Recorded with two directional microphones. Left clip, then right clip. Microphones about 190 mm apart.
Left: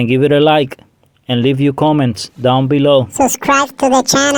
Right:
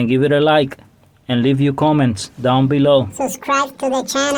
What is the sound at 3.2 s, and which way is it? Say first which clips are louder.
Speech: left 6 dB; 50° left (ahead or behind).